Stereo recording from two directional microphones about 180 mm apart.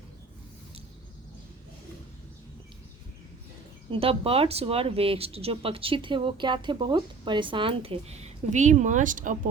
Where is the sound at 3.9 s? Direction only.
30° right (ahead or behind).